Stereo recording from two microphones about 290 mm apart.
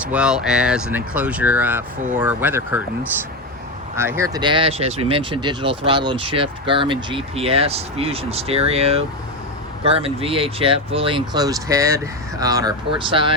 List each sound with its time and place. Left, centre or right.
0.0 s speech: centre
3.9 s speech: centre